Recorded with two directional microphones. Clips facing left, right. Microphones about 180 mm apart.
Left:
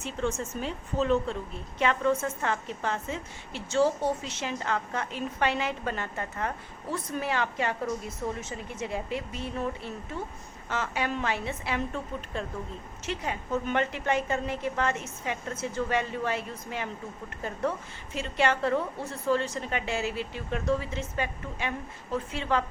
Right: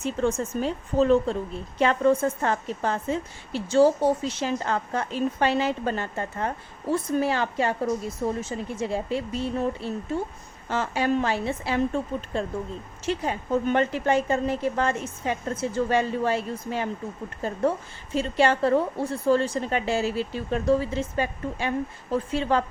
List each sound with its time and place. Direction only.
0.0 s a woman's voice: 35° right (ahead or behind)